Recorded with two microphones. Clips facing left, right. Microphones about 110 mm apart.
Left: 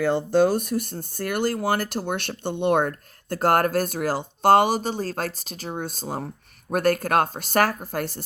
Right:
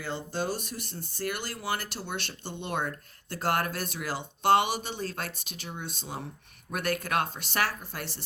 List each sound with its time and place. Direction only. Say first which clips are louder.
0.0 s speech: left 13 dB; 50° left (ahead or behind)